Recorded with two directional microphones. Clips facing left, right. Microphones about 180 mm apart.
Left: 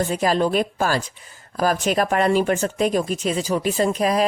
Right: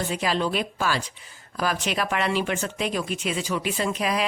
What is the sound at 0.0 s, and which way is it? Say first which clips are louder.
Speech: left 6 dB; 45° left (ahead or behind).